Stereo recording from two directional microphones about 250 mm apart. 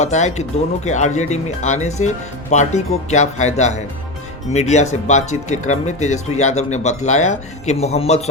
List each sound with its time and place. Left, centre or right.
0.0 s speech: left